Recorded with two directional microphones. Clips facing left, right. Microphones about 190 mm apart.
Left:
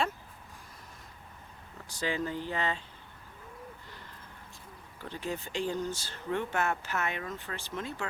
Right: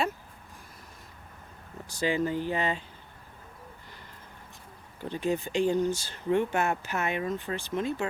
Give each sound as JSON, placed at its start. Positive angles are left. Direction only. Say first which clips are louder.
{"t": 2.0, "sound": "speech", "louder": "right 5 dB", "side_deg": -15}
{"t": 4.9, "sound": "speech", "louder": "right 8 dB", "side_deg": -15}